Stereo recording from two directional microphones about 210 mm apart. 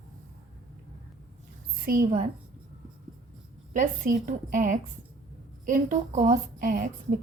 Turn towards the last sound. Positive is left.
turn(degrees=-40)  # may be behind; listen again after turning